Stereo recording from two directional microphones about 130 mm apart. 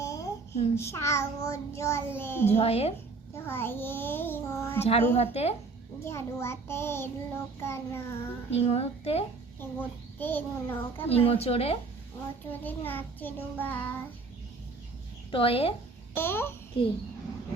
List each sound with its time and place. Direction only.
0.0 s a sound: 25° left (ahead or behind)
0.8 s child singing: 20° left (ahead or behind)
2.5 s a woman's voice: 50° left (ahead or behind)
3.3 s a child's voice: 20° left (ahead or behind)
4.8 s a woman's voice: 50° left (ahead or behind)
6.1 s child singing: 20° left (ahead or behind)
8.4 s a woman's voice: 50° left (ahead or behind)
9.6 s a child's voice: 15° left (ahead or behind)
11.3 s a woman's voice: 50° left (ahead or behind)
12.5 s a child's voice: 15° left (ahead or behind)
15.3 s a woman's voice: 45° left (ahead or behind)
16.1 s a child's voice: 15° left (ahead or behind)